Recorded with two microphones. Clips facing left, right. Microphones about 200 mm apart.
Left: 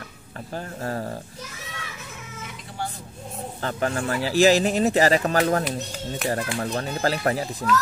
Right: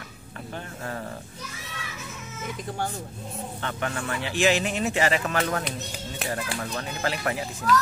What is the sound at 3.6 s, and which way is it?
Speech, 35° left (ahead or behind).